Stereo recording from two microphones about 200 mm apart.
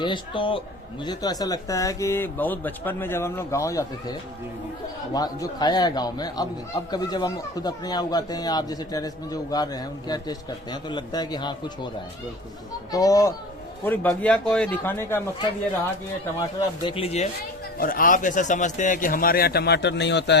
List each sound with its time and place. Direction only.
0.0 s a man's voice: 25° left (ahead or behind)
5.1 s a man's voice: 20° left (ahead or behind)
12.9 s speech: 15° left (ahead or behind)
16.4 s a man's voice: 25° left (ahead or behind)
17.7 s a man's voice: 45° left (ahead or behind); by 20.4 s 60° left (ahead or behind)